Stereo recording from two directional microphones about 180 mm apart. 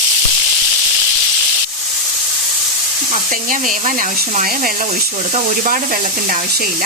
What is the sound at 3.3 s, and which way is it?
A woman's voice, 50° right (ahead or behind).